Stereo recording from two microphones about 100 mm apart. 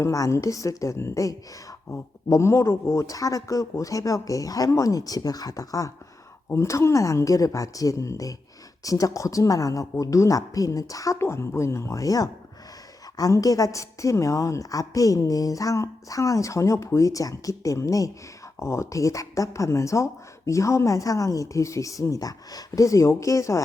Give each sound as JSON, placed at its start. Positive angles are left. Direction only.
{"t": 0.0, "sound": "a woman's voice", "side_deg": 30}